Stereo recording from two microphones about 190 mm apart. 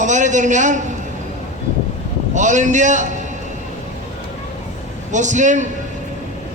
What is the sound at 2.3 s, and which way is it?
Speech, 40° right (ahead or behind).